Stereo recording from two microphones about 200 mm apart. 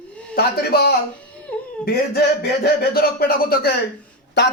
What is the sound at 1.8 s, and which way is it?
Speech, 50° left (ahead or behind).